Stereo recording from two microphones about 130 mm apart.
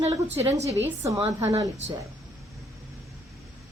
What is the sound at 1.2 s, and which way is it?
Speech, 25° right (ahead or behind).